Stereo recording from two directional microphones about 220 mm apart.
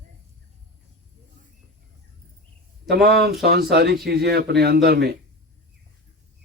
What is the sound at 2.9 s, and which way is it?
Speech, 45° right (ahead or behind).